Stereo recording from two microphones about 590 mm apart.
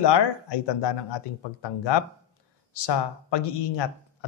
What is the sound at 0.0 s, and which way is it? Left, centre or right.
Speech, left.